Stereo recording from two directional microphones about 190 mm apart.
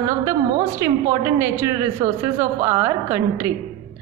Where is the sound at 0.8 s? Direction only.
15° right (ahead or behind).